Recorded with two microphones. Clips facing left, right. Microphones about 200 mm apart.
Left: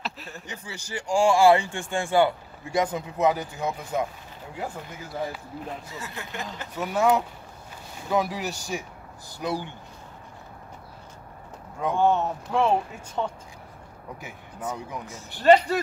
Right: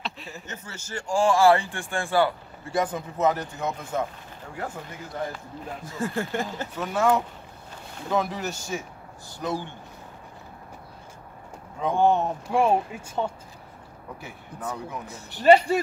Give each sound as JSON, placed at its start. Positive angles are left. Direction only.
{"t": 0.0, "sound": "a sound", "side_deg": 0}
{"t": 0.5, "sound": "speech", "side_deg": 15}
{"t": 5.1, "sound": "speech", "side_deg": 5}
{"t": 5.9, "sound": "speech", "side_deg": -50}
{"t": 6.8, "sound": "speech", "side_deg": 10}
{"t": 12.0, "sound": "speech", "side_deg": -15}
{"t": 14.2, "sound": "speech", "side_deg": 15}
{"t": 15.4, "sound": "speech", "side_deg": -10}